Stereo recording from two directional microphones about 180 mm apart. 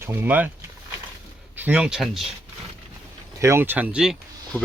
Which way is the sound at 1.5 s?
10° right (ahead or behind).